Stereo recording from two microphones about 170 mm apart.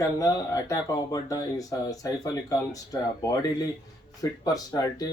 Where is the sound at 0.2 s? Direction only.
20° left (ahead or behind).